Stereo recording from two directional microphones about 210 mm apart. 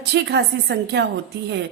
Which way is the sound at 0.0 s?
55° right (ahead or behind).